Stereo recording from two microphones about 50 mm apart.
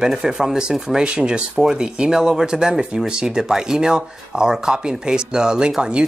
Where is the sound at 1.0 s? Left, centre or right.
Centre.